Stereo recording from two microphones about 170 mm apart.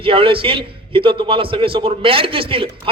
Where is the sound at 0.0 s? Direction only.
30° right (ahead or behind).